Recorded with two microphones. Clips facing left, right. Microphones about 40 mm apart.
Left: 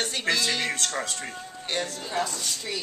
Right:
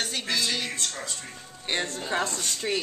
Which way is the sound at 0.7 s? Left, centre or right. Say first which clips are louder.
Left 4 dB; left.